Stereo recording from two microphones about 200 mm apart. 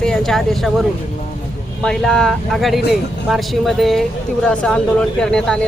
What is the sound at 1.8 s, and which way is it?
Speech, 5° left (ahead or behind).